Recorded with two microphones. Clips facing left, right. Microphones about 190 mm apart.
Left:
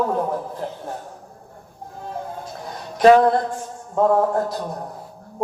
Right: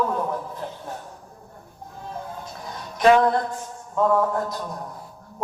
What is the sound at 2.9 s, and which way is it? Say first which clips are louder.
Music: left 4 dB; 35° left (ahead or behind).